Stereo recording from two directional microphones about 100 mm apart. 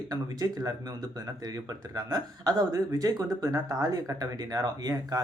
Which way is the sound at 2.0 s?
40° right (ahead or behind).